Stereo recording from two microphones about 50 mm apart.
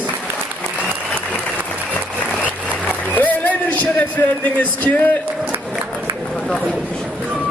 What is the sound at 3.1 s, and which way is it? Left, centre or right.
Speech, left.